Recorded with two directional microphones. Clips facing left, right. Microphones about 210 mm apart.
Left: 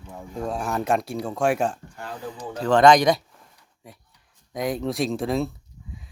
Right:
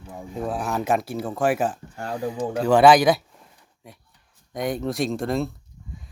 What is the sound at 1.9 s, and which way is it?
Speech, 45° right (ahead or behind).